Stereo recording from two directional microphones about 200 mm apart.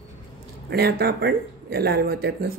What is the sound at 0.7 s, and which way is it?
Speech, 50° right (ahead or behind).